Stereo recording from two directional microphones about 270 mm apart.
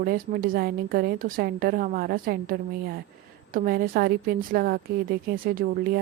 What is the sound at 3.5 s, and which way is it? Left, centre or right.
A woman's voice, right.